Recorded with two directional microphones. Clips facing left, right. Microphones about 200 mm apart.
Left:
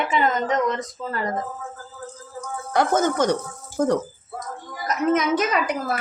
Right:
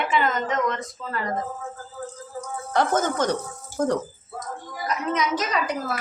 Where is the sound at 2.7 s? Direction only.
10° left (ahead or behind).